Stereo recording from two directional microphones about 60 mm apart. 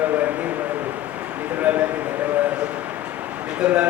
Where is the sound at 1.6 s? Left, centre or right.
Right.